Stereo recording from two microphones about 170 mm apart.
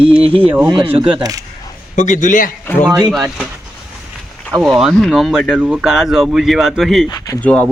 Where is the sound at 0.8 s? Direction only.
10° right (ahead or behind).